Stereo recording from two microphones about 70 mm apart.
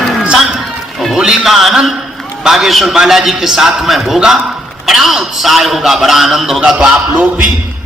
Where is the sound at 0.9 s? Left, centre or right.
Centre.